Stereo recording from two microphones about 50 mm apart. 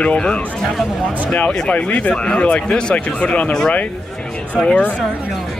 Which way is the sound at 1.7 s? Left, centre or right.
Left.